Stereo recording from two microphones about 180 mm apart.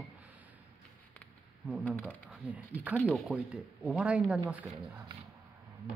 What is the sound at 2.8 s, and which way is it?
Speech, 10° right (ahead or behind).